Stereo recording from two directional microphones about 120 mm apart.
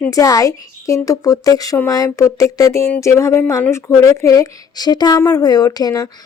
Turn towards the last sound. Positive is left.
turn(degrees=35)  # may be behind; listen again after turning